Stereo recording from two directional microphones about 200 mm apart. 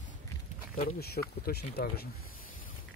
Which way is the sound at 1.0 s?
50° left (ahead or behind).